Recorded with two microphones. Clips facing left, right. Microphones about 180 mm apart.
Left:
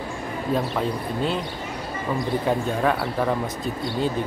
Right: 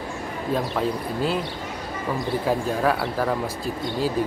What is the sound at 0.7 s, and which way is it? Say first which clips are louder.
Speech: even; 5° right (ahead or behind).